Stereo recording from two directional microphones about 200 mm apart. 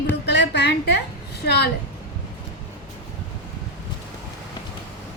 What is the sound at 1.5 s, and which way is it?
Speech, 55° left (ahead or behind).